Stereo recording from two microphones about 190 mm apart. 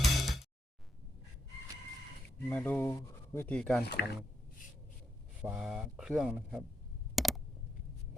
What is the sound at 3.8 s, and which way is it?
Speech, 60° left (ahead or behind).